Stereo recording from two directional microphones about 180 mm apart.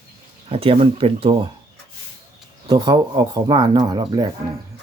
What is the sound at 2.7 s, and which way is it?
Speech, 25° right (ahead or behind).